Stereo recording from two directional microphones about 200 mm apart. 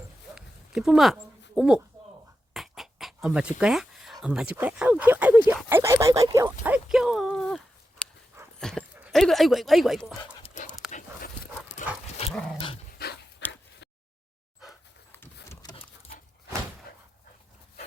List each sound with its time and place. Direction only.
0.3 s dog: 5° right (ahead or behind)
2.5 s a sound: centre (ahead or behind)
3.6 s speech: 5° right (ahead or behind)
8.5 s dog: 5° left (ahead or behind)
9.0 s dog: 10° right (ahead or behind)
9.2 s speech: centre (ahead or behind)
10.4 s dog: 35° left (ahead or behind)
12.0 s dog: 30° left (ahead or behind)
13.0 s dog: 50° left (ahead or behind)
13.4 s oink: 60° left (ahead or behind)
15.4 s a sound: 20° left (ahead or behind)